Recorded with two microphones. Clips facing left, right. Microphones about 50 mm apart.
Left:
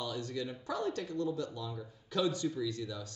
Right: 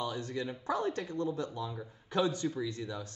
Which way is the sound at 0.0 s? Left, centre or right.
Right.